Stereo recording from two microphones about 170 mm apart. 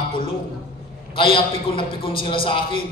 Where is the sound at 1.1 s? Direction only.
30° left (ahead or behind).